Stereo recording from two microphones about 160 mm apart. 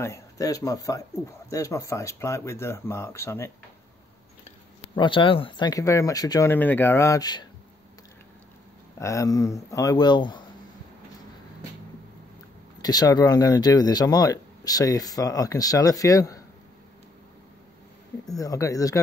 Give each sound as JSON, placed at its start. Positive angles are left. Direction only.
{"t": 0.0, "sound": "speech", "side_deg": 20}
{"t": 4.9, "sound": "speech", "side_deg": 30}
{"t": 5.7, "sound": "speech", "side_deg": 20}
{"t": 6.5, "sound": "speech", "side_deg": 10}
{"t": 9.0, "sound": "speech", "side_deg": 20}
{"t": 12.8, "sound": "speech", "side_deg": 25}
{"t": 18.2, "sound": "speech", "side_deg": 20}